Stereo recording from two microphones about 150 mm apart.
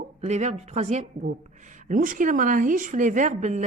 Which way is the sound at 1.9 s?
65° right (ahead or behind).